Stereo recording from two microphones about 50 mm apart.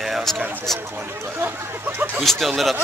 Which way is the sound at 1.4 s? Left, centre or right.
Right.